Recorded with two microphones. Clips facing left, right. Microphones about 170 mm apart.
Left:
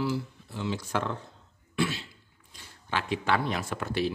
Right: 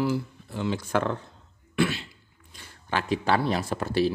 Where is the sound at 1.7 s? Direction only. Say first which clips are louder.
Right 4 dB; 65° right (ahead or behind).